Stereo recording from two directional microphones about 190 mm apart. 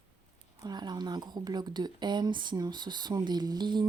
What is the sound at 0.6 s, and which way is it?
A woman's voice, 20° right (ahead or behind).